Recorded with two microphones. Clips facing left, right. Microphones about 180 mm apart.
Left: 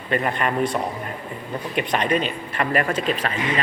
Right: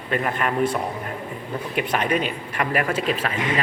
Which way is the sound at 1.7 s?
5° right (ahead or behind).